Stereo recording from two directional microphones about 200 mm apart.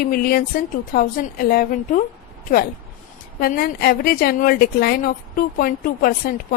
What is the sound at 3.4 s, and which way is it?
A woman's voice, 50° left (ahead or behind).